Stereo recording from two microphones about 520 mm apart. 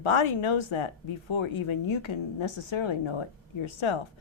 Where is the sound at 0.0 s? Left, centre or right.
Left.